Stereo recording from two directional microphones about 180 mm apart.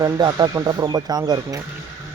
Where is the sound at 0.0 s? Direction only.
20° right (ahead or behind).